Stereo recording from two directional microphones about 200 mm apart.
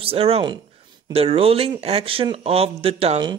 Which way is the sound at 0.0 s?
30° right (ahead or behind).